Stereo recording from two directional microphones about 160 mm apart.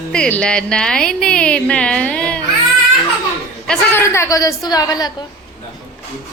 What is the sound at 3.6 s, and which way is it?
A woman's voice, 10° left (ahead or behind).